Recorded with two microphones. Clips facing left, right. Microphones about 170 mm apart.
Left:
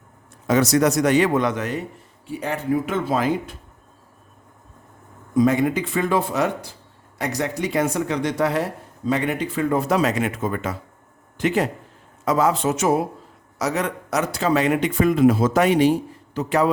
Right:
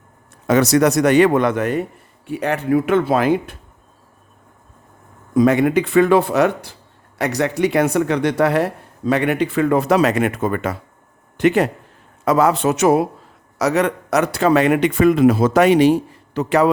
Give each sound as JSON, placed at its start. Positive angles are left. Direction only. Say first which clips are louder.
{"t": 0.4, "sound": "speech", "louder": "right 3 dB", "side_deg": -70}
{"t": 2.2, "sound": "speech", "louder": "right 5 dB", "side_deg": -70}
{"t": 5.3, "sound": "speech", "louder": "right 4 dB", "side_deg": -70}